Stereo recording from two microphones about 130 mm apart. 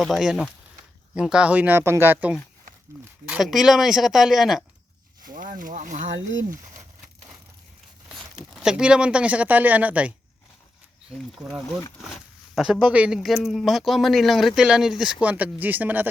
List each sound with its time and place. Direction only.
0.0 s speech: centre (ahead or behind)
3.2 s speech: 5° right (ahead or behind)
5.2 s speech: 90° right
8.1 s speech: 5° right (ahead or behind)
12.5 s speech: 5° right (ahead or behind)